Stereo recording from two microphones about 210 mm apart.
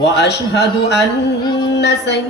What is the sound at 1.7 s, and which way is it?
Child singing, 55° left (ahead or behind).